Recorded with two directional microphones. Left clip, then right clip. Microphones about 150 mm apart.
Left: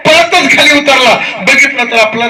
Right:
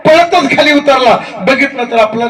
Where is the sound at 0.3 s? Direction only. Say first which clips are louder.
Left 2 dB; 50° right (ahead or behind).